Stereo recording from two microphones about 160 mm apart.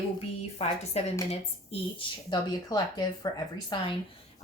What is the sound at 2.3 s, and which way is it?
Speech, 25° left (ahead or behind).